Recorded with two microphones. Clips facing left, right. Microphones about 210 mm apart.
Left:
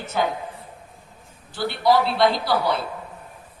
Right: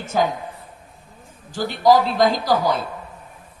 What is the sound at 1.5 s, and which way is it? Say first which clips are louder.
Speech: right 3 dB; 45° right (ahead or behind).